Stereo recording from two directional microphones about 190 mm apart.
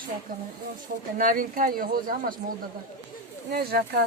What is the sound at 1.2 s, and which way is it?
Speech, 45° right (ahead or behind).